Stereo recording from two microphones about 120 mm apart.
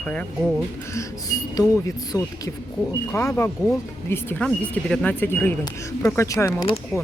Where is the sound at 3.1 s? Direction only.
15° left (ahead or behind).